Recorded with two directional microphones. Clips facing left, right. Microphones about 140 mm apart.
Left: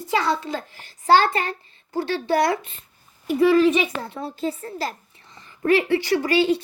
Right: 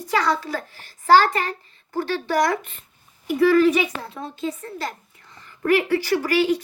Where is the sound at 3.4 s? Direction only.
25° left (ahead or behind).